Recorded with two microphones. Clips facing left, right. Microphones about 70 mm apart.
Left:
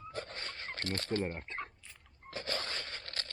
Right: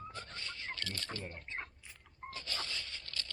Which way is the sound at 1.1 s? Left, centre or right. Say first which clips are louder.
Left 10 dB; left.